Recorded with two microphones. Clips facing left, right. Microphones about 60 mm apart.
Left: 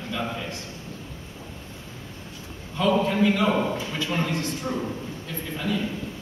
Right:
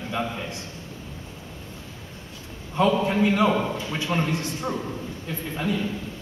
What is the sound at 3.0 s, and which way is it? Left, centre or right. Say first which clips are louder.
A man's voice: right 1 dB; right.